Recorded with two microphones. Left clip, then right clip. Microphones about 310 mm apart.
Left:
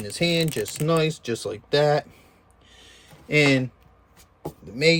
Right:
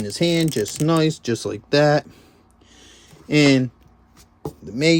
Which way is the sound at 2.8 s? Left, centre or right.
Centre.